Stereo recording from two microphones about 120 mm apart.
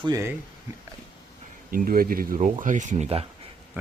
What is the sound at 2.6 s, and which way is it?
Speech, 90° right.